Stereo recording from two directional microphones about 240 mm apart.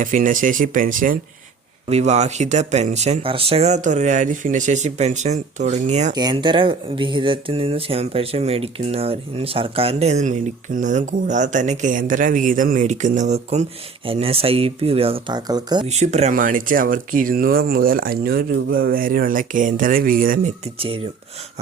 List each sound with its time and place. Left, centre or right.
0.0 s speech: right
6.1 s speech: centre; by 20.5 s right
20.7 s speech: right